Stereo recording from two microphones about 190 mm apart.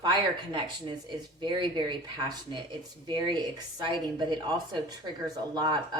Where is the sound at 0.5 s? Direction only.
25° right (ahead or behind).